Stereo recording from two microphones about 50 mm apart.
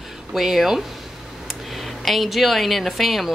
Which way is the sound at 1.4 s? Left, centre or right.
Centre.